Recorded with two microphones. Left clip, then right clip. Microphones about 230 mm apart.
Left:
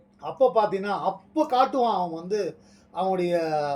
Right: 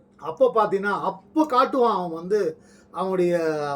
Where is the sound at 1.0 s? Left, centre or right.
Centre.